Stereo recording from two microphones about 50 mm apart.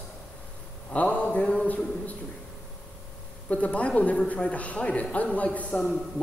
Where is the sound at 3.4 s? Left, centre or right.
Left.